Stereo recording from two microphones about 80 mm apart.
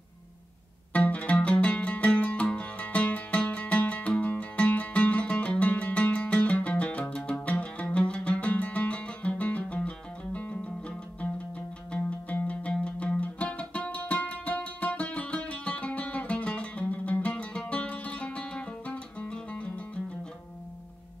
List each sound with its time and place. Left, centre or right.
0.9 s music: centre